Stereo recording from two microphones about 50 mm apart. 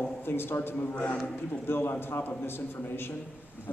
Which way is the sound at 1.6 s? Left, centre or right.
Left.